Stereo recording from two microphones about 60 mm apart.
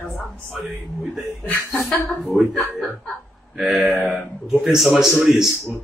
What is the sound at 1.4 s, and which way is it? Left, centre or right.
Chuckle, left.